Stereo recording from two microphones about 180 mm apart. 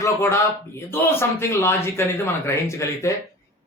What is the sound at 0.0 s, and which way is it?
Speech, 15° left (ahead or behind).